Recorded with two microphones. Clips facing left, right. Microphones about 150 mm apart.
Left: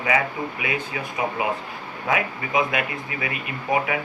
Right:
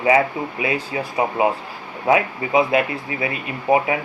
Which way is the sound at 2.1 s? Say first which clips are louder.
Right 7 dB; 30° right (ahead or behind).